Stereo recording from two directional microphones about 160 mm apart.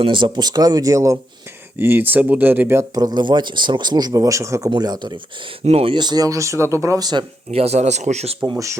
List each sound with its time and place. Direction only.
0.0 s speech: 30° right (ahead or behind)
5.6 s speech: 40° right (ahead or behind)
8.4 s speech: 20° right (ahead or behind)